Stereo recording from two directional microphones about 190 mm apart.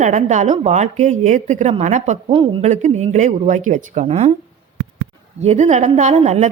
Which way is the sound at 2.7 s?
40° right (ahead or behind).